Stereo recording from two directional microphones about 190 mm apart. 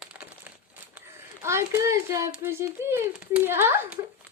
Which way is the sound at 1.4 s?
15° right (ahead or behind).